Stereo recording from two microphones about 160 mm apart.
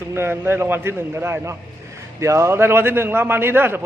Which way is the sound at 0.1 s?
15° right (ahead or behind).